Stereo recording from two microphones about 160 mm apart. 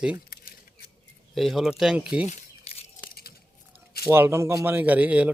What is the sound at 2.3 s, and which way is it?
Crumpling, 40° left (ahead or behind).